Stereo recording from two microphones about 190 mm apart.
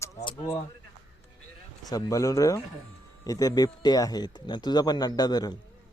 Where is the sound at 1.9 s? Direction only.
20° left (ahead or behind).